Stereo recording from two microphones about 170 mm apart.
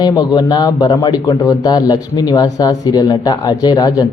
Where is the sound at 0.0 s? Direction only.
25° left (ahead or behind).